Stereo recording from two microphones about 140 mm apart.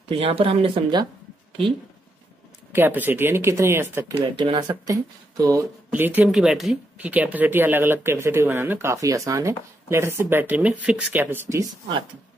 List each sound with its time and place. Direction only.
0.1 s speech: 45° right (ahead or behind)
2.7 s speech: 15° right (ahead or behind)
4.4 s speech: 30° right (ahead or behind)
5.9 s speech: 15° right (ahead or behind)